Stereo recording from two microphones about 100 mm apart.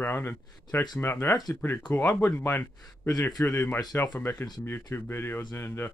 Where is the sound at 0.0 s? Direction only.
20° left (ahead or behind).